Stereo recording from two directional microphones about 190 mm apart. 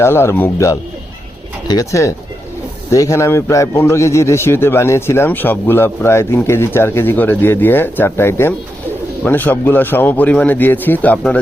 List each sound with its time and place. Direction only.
0.0 s a man's voice: 15° left (ahead or behind)